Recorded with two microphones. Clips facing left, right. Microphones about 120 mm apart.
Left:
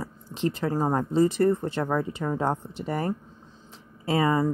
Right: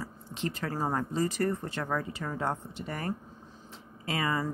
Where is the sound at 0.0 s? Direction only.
25° left (ahead or behind).